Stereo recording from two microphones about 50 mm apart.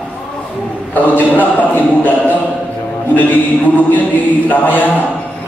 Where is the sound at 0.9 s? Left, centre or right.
Left.